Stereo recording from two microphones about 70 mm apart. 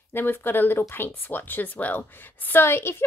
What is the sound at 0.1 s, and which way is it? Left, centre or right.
Speech, left.